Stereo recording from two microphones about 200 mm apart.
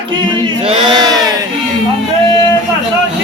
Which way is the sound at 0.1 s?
25° right (ahead or behind).